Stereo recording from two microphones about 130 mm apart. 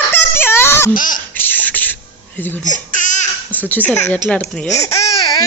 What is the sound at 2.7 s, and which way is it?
Babbling, 80° left.